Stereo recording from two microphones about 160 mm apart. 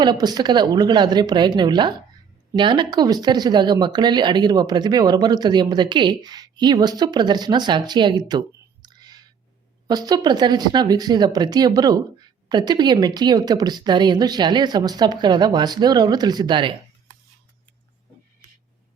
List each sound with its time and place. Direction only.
0.0 s speech: 25° right (ahead or behind)